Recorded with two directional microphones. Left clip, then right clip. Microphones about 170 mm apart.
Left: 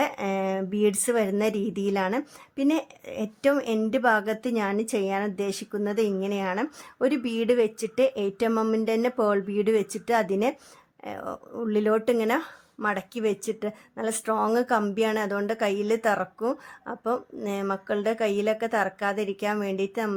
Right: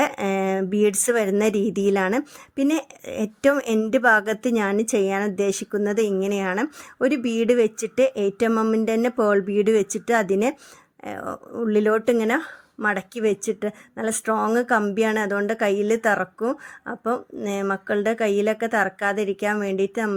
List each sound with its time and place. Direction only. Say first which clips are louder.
0.0 s speech: right 4 dB; 30° right (ahead or behind)